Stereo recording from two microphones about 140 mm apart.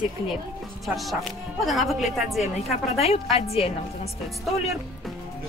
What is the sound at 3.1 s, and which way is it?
A woman's voice, 45° left (ahead or behind).